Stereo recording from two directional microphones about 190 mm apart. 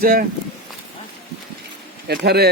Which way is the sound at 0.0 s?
50° right (ahead or behind).